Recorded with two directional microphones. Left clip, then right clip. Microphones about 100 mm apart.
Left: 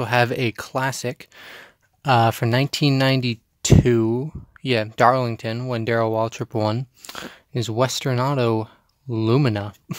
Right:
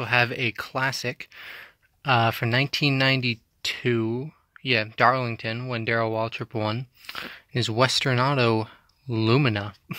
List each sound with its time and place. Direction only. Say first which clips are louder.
0.1 s speech: left 2 dB; 65° left (ahead or behind)
0.6 s speech: left 2 dB; 40° left (ahead or behind)
7.3 s speech: left 1 dB; 25° left (ahead or behind)